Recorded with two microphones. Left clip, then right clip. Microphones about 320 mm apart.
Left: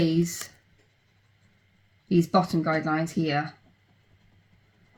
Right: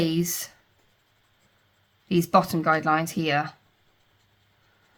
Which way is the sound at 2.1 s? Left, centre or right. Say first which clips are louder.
Right 2 dB; centre.